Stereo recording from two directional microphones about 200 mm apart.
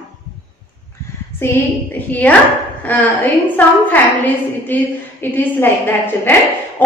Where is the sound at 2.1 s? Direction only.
10° left (ahead or behind).